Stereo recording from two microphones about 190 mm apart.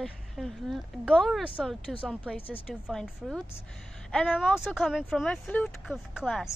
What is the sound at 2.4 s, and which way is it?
Speech, 30° left (ahead or behind).